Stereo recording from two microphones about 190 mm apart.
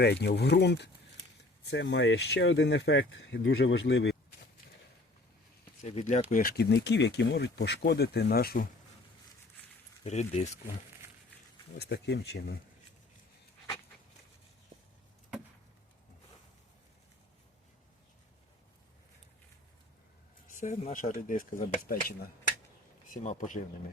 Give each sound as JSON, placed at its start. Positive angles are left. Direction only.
{"t": 0.0, "sound": "speech", "side_deg": 60}
{"t": 5.8, "sound": "speech", "side_deg": 35}
{"t": 6.3, "sound": "speech", "side_deg": 55}
{"t": 10.0, "sound": "speech", "side_deg": 35}
{"t": 11.8, "sound": "speech", "side_deg": 60}
{"t": 20.6, "sound": "speech", "side_deg": 40}